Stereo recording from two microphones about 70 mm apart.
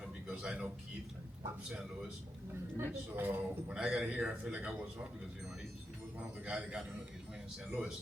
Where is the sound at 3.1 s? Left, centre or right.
Right.